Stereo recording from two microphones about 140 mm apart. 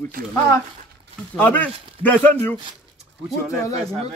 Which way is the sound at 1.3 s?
10° left (ahead or behind).